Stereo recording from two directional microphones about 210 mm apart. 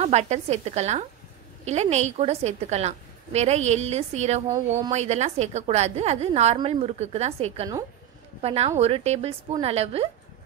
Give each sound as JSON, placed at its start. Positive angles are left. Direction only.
{"t": 0.0, "sound": "a woman's voice", "side_deg": -30}